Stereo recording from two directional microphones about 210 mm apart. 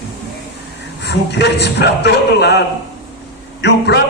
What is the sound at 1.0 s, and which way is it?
A man's voice, 55° left (ahead or behind).